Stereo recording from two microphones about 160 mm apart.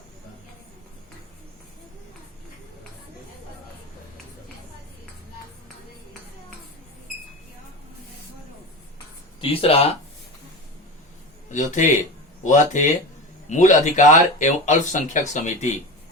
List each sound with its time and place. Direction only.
9.4 s speech: 35° left (ahead or behind)
11.4 s a man's voice: 50° left (ahead or behind)